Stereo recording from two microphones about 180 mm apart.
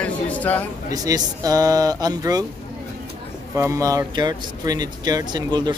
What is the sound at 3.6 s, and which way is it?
Speech, 15° right (ahead or behind).